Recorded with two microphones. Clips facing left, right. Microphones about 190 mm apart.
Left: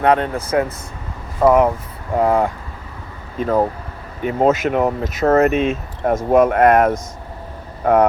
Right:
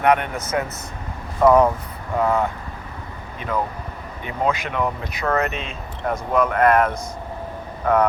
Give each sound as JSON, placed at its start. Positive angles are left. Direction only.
{"t": 0.0, "sound": "speech", "side_deg": 30}
{"t": 3.3, "sound": "speech", "side_deg": 40}